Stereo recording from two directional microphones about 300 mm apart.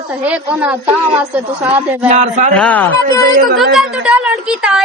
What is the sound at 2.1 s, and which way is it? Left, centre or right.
Speech, right.